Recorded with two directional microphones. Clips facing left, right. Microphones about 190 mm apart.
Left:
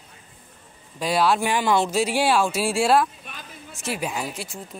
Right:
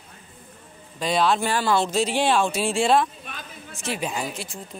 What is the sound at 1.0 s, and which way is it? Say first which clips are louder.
Speech: left 1 dB; 5° left (ahead or behind).